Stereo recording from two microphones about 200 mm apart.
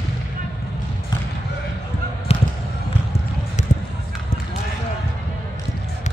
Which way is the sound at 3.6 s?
35° left (ahead or behind).